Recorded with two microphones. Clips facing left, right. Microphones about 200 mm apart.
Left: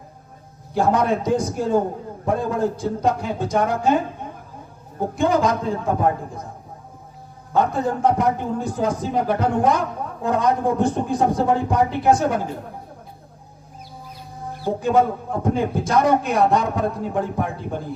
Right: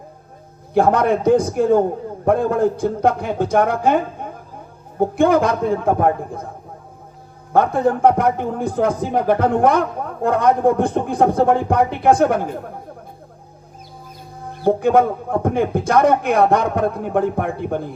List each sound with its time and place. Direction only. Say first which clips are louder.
0.7 s a man's voice: right 4 dB; 55° right (ahead or behind)
4.2 s a sound: right 3 dB; 60° right (ahead or behind)
5.1 s a man's voice: right 3 dB; 55° right (ahead or behind)
7.5 s a man's voice: right 4 dB; 55° right (ahead or behind)
14.6 s a man's voice: right 4 dB; 55° right (ahead or behind)